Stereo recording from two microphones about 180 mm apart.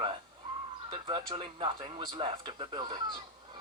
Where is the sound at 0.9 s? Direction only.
25° right (ahead or behind).